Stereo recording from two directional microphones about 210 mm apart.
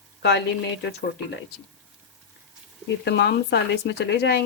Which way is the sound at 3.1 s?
55° left (ahead or behind).